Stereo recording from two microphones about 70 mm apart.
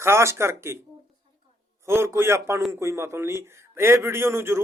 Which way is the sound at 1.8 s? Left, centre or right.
Right.